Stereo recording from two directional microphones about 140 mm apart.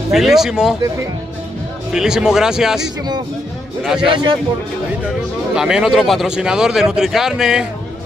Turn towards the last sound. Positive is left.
turn(degrees=-5)  # may be behind; listen again after turning